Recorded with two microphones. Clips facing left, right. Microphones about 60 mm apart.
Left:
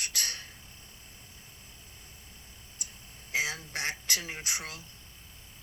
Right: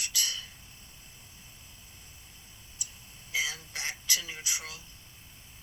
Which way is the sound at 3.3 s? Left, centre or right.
Left.